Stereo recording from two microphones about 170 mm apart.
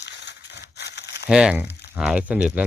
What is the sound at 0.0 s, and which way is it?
Crumpling, 90° left.